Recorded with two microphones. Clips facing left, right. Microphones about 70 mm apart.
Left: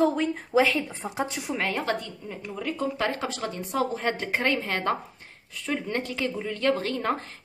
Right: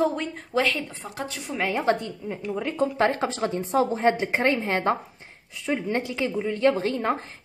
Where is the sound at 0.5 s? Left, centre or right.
Centre.